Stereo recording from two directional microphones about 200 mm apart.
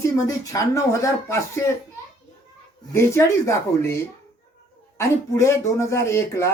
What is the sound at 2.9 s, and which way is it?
Speech, 15° left (ahead or behind).